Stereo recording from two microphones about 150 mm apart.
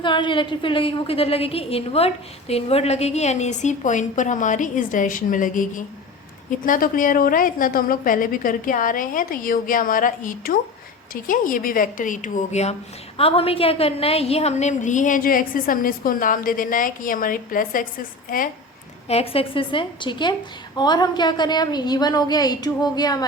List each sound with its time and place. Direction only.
0.0 s a woman's voice: 30° left (ahead or behind); by 18.4 s 65° left (ahead or behind)
19.0 s a woman's voice: 40° left (ahead or behind)